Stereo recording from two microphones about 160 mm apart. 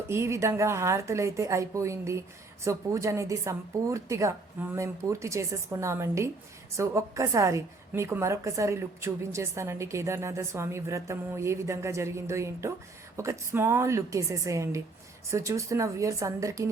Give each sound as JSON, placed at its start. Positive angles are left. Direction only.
{"t": 0.1, "sound": "a woman's voice", "side_deg": -15}